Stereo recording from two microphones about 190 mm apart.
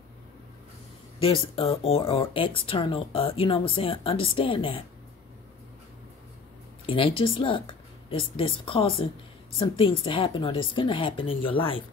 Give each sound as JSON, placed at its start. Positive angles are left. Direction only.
{"t": 1.2, "sound": "speech", "side_deg": 30}
{"t": 6.9, "sound": "speech", "side_deg": 30}